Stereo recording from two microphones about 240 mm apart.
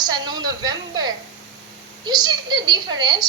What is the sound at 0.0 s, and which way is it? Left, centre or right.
A woman's voice, centre.